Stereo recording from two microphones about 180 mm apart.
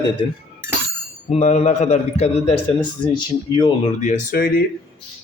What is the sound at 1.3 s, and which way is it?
A man's voice, 40° left (ahead or behind).